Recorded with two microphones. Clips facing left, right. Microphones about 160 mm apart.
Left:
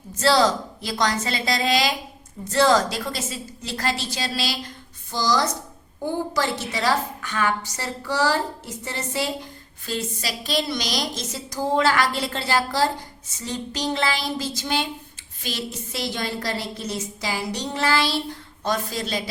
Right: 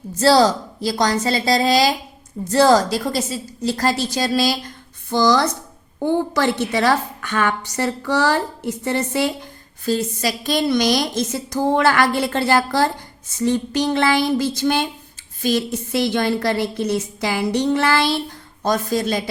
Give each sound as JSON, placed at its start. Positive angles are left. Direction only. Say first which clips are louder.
{"t": 0.2, "sound": "a woman's voice", "louder": "right 5 dB", "side_deg": -35}
{"t": 5.1, "sound": "a woman's voice", "louder": "right 6 dB", "side_deg": -60}
{"t": 9.8, "sound": "a woman's voice", "louder": "right 8 dB", "side_deg": -40}
{"t": 18.6, "sound": "a woman's voice", "louder": "right 6 dB", "side_deg": -45}